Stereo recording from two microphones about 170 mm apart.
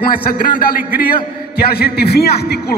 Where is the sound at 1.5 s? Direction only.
65° left (ahead or behind).